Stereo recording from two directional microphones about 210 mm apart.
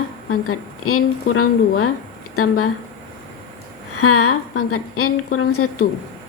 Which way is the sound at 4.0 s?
90° left.